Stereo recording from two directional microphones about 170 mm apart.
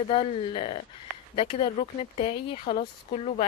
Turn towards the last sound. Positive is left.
turn(degrees=35)  # may be behind; listen again after turning